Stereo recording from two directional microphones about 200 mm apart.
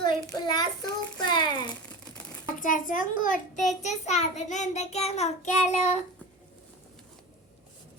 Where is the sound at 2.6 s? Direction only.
45° left (ahead or behind).